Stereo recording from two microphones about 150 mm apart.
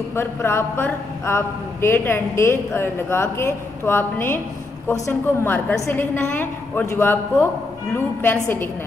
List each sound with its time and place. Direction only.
0.1 s a man's voice: 15° left (ahead or behind)